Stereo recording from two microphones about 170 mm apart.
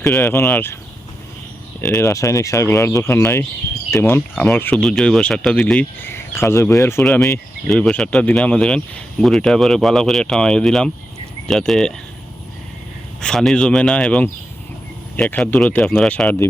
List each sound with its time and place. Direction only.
0.0 s speech: 5° left (ahead or behind)
1.9 s speech: 15° left (ahead or behind)
7.0 s speech: 5° left (ahead or behind)
13.2 s speech: 5° left (ahead or behind)